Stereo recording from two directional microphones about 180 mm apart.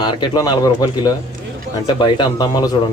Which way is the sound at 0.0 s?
25° left (ahead or behind).